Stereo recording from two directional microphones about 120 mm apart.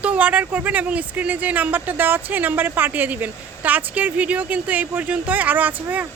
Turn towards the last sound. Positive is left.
turn(degrees=-15)  # may be behind; listen again after turning